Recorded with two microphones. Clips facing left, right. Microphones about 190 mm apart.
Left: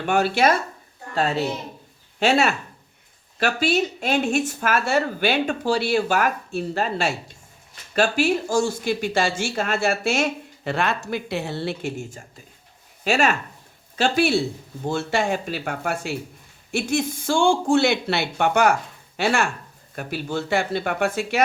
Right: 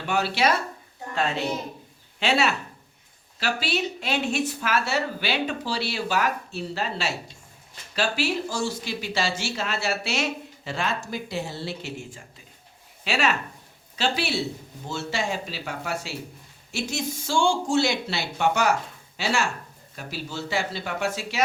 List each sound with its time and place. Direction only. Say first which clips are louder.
0.0 s speech: left 5 dB; 50° left (ahead or behind)
1.1 s a woman's voice: left 3 dB; 35° left (ahead or behind); by 21.4 s 55° left (ahead or behind)